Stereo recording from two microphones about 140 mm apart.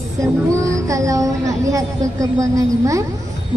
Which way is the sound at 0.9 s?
25° right (ahead or behind).